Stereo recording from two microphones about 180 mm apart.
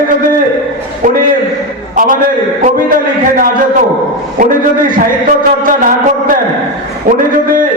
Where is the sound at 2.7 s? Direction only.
50° right (ahead or behind).